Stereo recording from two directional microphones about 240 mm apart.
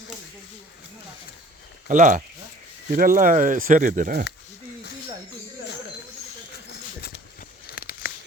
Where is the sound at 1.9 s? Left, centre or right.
Right.